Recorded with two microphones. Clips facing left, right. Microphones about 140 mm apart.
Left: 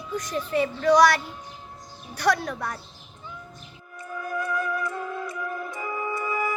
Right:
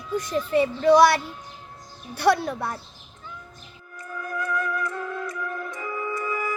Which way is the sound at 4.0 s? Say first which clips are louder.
Left 1 dB; 25° left (ahead or behind).